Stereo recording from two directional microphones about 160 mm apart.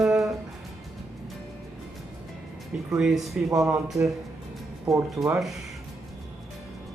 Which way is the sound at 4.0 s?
15° right (ahead or behind).